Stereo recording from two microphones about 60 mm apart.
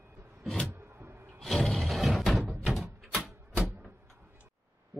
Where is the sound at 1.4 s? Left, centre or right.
Centre.